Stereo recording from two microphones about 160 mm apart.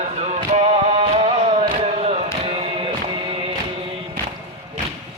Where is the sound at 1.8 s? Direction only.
40° right (ahead or behind).